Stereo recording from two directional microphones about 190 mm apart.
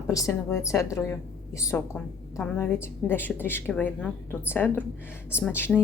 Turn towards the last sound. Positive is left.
turn(degrees=10)  # may be behind; listen again after turning